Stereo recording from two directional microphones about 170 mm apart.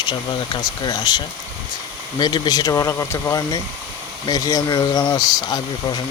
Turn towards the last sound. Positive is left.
turn(degrees=25)  # may be behind; listen again after turning